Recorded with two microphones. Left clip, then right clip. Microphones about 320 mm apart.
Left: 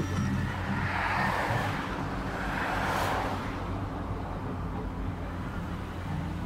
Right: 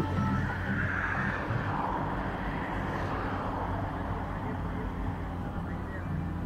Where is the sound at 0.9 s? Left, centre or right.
Centre.